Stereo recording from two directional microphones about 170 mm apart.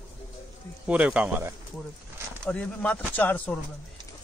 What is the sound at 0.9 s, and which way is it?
Speech, 5° right (ahead or behind).